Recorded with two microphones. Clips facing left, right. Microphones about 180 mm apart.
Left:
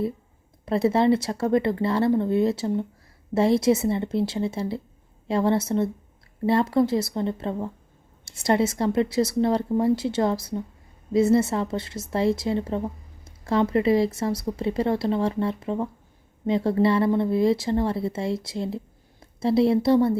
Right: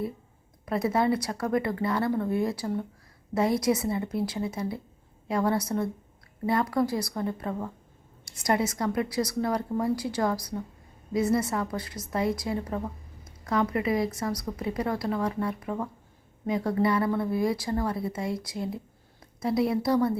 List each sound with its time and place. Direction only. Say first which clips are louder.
0.6 s a woman's voice: left 5 dB; 25° left (ahead or behind)